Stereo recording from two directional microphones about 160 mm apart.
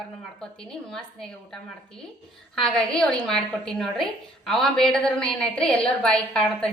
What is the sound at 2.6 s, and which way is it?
A woman's voice, 5° left (ahead or behind).